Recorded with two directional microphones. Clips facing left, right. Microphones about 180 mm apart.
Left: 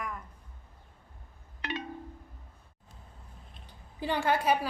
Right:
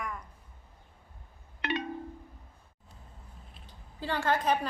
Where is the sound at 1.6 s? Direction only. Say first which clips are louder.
Right 4 dB; 65° right (ahead or behind).